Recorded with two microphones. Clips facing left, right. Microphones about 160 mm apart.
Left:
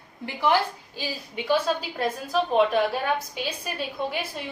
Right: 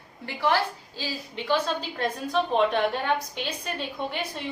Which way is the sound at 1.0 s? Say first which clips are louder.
Left 1 dB; 10° left (ahead or behind).